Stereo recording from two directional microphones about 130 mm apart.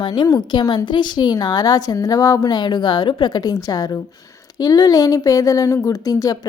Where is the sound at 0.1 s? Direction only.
30° left (ahead or behind).